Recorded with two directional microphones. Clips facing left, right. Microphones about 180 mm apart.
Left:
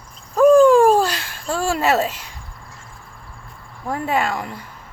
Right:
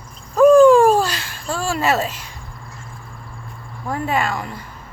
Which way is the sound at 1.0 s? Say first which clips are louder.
Left 1 dB; 55° left (ahead or behind).